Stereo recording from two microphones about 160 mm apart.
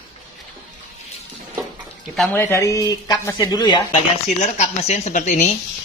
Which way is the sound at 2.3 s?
15° left (ahead or behind).